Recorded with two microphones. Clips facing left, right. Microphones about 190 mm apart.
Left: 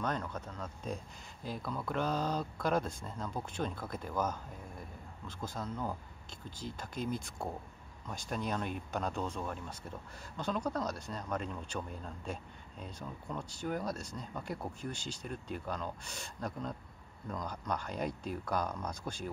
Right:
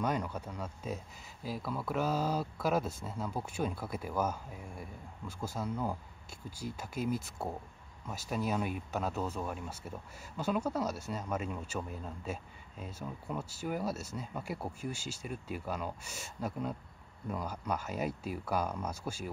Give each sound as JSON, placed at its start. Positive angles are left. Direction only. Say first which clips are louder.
{"t": 0.0, "sound": "speech", "louder": "right 3 dB", "side_deg": -10}